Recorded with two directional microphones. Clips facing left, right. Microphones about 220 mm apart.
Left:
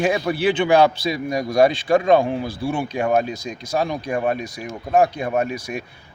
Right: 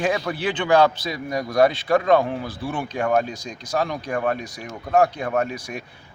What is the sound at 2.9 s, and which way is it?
Speech, 20° left (ahead or behind).